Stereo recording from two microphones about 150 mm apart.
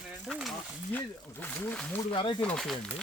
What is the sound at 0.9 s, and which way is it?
Speech, 10° left (ahead or behind).